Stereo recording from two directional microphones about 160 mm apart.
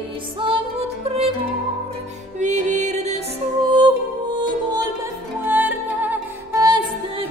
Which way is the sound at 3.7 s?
25° right (ahead or behind).